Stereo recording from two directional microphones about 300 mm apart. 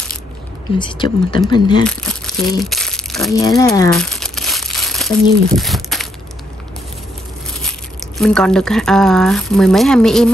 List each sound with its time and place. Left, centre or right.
0.7 s speech: centre
1.9 s crumpling: centre
3.4 s speech: centre
4.1 s crumpling: centre
8.2 s speech: centre